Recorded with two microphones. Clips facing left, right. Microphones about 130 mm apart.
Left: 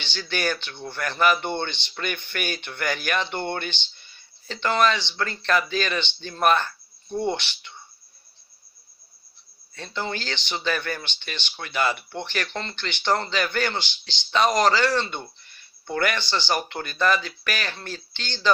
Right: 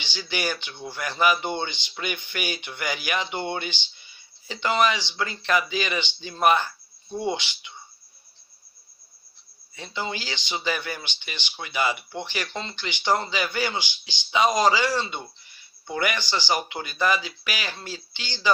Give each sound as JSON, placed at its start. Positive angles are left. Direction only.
{"t": 0.0, "sound": "speech", "side_deg": -10}
{"t": 9.7, "sound": "speech", "side_deg": -15}